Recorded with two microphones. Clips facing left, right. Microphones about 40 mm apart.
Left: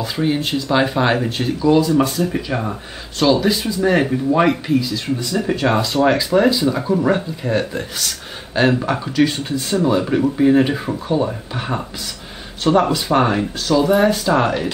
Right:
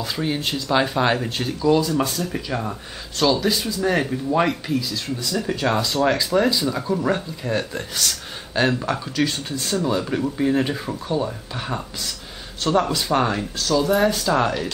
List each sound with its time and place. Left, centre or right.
0.0 s speech: centre